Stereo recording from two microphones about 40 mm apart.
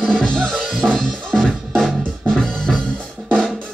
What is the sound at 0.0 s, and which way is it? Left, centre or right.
Music, left.